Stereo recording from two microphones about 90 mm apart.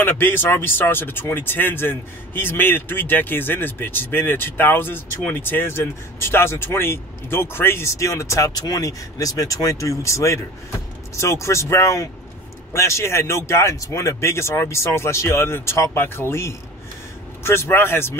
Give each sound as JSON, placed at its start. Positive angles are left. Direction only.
{"t": 0.0, "sound": "speech", "side_deg": 25}